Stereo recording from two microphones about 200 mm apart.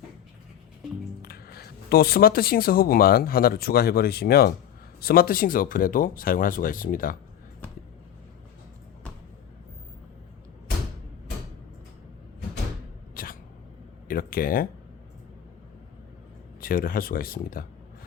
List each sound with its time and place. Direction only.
1.2 s speech: 50° left (ahead or behind)
13.2 s a sound: 45° left (ahead or behind)
16.6 s speech: 45° left (ahead or behind)